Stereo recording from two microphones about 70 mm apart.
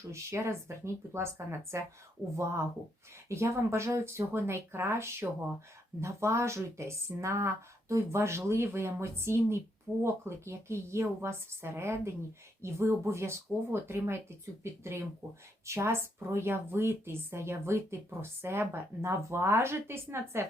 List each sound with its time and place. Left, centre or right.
0.1 s speech: right
3.2 s speech: right